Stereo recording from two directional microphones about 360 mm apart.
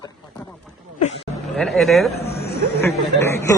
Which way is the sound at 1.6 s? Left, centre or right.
Centre.